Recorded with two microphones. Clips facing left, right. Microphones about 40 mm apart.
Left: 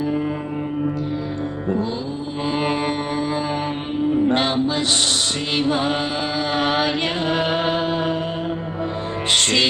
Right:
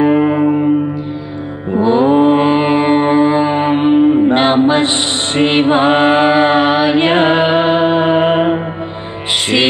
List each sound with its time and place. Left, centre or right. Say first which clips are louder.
0.0 s music: right 12 dB; right
1.9 s mantra: right 18 dB; right
2.5 s mantra: right 10 dB; right
4.3 s a sound: right 9 dB; right
4.8 s chant: right 4 dB; right
6.6 s chant: right 8 dB; right
7.1 s music: right 10 dB; right